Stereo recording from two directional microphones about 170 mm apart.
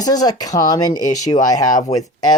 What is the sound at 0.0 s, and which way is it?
Speech, 20° left (ahead or behind).